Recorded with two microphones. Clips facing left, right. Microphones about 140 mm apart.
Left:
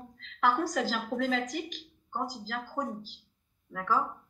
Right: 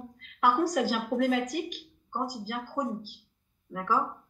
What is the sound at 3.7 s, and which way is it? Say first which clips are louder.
Speech: right 1 dB; 10° right (ahead or behind).